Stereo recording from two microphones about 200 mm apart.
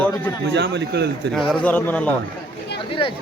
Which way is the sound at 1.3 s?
Centre (ahead or behind).